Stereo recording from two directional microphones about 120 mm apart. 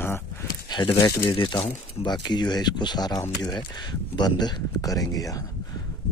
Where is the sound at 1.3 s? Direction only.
40° left (ahead or behind).